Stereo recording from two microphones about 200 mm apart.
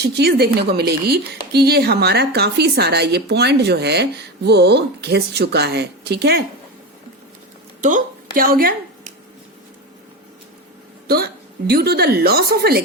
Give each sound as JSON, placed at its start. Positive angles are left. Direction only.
{"t": 0.0, "sound": "a woman's voice", "side_deg": -55}
{"t": 7.8, "sound": "a sound", "side_deg": -40}
{"t": 11.1, "sound": "a woman's voice", "side_deg": -50}